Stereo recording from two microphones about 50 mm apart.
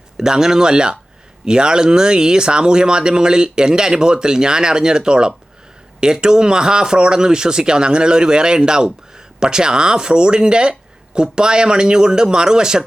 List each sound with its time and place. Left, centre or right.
0.2 s speech: centre